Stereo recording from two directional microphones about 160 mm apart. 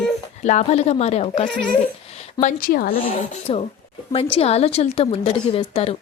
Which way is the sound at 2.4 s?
55° left (ahead or behind).